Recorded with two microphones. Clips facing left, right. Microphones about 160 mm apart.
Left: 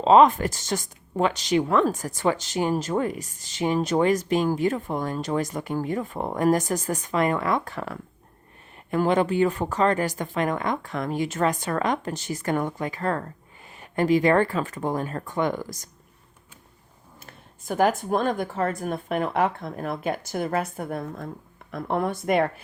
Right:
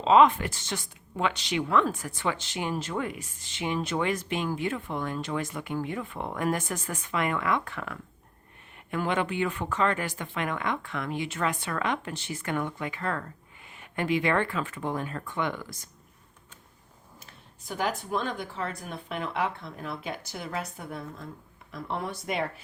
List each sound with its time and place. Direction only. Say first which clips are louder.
0.0 s speech: left 4 dB; 40° left (ahead or behind)
17.2 s speech: left 8 dB; 50° left (ahead or behind)